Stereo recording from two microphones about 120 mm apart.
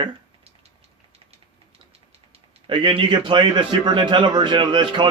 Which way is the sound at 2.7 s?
45° right (ahead or behind).